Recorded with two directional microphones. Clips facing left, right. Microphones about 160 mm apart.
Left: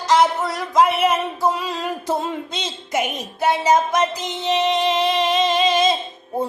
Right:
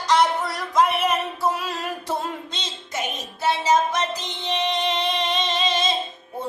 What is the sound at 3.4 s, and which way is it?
Music, 50° left (ahead or behind).